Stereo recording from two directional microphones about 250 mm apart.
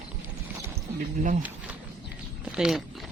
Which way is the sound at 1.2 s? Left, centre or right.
Right.